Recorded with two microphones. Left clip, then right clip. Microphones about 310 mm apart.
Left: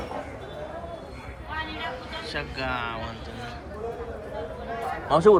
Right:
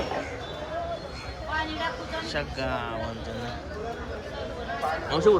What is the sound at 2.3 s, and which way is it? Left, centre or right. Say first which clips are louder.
Speech: left 1 dB; centre.